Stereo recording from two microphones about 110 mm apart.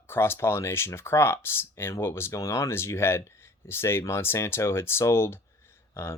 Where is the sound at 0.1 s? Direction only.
20° left (ahead or behind).